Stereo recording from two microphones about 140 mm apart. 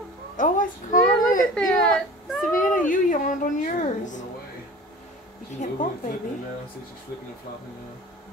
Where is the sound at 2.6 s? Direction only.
70° left (ahead or behind).